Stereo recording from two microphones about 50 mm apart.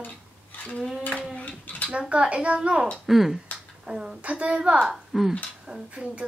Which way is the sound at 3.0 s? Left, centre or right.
Centre.